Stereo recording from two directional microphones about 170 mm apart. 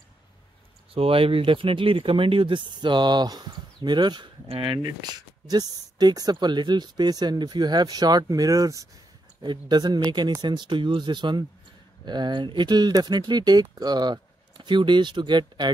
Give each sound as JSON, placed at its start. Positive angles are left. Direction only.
{"t": 0.9, "sound": "speech", "side_deg": -35}